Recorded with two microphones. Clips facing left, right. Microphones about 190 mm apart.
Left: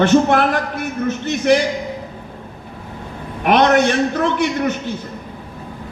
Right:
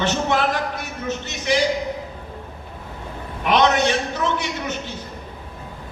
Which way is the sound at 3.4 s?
55° left (ahead or behind).